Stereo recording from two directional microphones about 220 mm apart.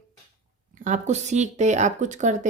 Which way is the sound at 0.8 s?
30° right (ahead or behind).